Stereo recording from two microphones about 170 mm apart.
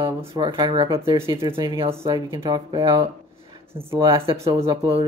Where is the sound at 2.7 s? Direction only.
30° right (ahead or behind).